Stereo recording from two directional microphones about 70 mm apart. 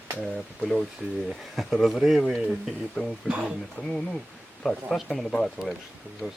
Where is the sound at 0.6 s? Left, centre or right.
Centre.